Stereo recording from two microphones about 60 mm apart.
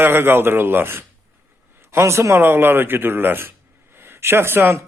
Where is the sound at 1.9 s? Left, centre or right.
Right.